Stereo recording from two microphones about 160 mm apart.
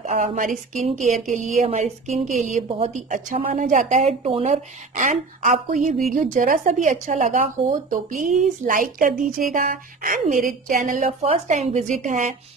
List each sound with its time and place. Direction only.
0.0 s speech: 55° right (ahead or behind)
11.1 s speech: 45° right (ahead or behind)